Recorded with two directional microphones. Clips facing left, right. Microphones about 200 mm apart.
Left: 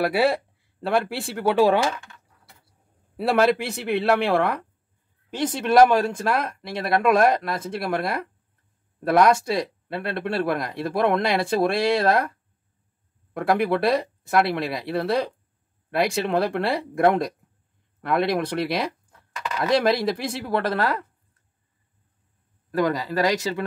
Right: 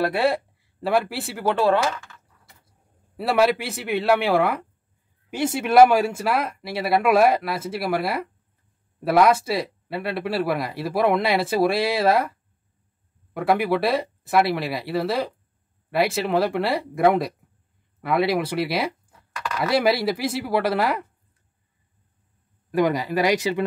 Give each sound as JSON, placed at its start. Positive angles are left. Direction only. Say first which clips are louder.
{"t": 0.0, "sound": "speech", "louder": "left 1 dB", "side_deg": 5}
{"t": 3.2, "sound": "speech", "louder": "even", "side_deg": 0}
{"t": 22.7, "sound": "speech", "louder": "right 2 dB", "side_deg": -15}